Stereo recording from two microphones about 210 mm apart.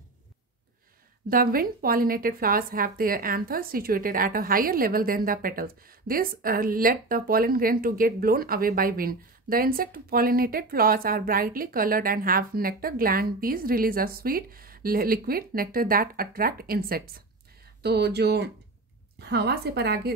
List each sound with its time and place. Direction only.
1.3 s a woman's voice: 45° right (ahead or behind)